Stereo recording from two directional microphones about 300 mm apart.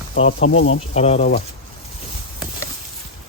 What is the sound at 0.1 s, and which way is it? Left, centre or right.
Speech, left.